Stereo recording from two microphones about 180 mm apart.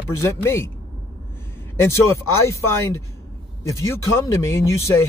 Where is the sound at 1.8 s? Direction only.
15° left (ahead or behind).